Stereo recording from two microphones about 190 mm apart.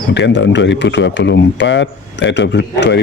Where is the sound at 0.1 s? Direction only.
70° left (ahead or behind).